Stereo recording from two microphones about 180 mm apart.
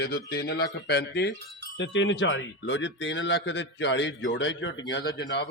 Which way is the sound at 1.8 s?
90° left.